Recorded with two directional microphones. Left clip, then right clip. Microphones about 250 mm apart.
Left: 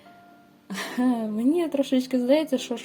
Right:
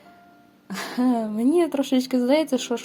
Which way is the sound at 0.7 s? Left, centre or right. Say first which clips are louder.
Right 2 dB; right.